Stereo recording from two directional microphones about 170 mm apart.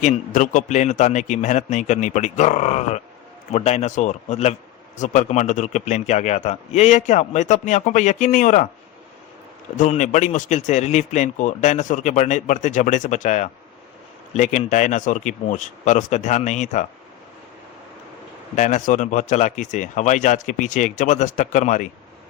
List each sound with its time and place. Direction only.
0.0 s a man's voice: 45° left (ahead or behind)
9.7 s a man's voice: 45° left (ahead or behind)
18.5 s a man's voice: 45° left (ahead or behind)